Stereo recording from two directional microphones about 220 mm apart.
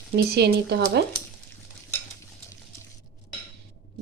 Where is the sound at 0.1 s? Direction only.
50° right (ahead or behind).